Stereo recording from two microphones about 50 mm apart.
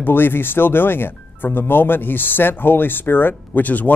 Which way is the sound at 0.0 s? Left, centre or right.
Left.